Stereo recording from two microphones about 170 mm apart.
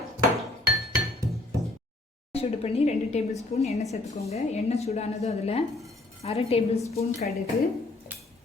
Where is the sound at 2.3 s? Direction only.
35° left (ahead or behind).